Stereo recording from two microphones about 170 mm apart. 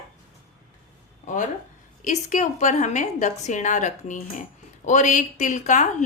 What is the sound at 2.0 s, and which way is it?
A woman's voice, 45° left (ahead or behind).